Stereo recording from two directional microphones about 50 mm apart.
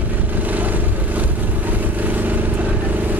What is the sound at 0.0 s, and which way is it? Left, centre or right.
Vehicle, right.